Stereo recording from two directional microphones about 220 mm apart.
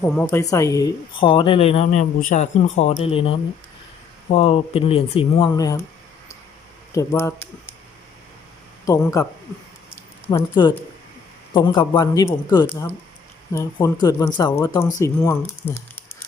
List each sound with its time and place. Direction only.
0.0 s speech: 10° left (ahead or behind)
6.9 s speech: 15° left (ahead or behind)
8.9 s speech: 15° left (ahead or behind)
10.5 s speech: 20° left (ahead or behind)